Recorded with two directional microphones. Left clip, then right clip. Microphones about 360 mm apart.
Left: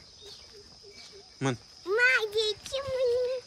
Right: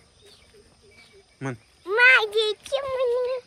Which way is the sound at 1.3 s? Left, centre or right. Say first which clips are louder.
Left 2 dB; centre.